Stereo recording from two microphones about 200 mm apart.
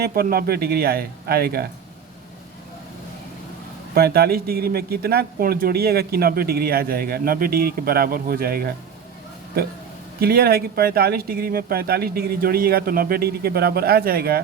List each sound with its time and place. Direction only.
0.0 s speech: 50° right (ahead or behind)
3.9 s speech: 50° right (ahead or behind)
10.2 s speech: 50° right (ahead or behind)